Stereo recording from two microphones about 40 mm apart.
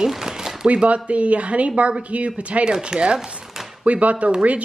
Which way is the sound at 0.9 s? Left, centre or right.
Right.